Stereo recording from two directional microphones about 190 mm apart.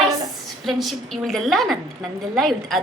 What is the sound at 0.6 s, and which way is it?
A woman's voice, centre (ahead or behind).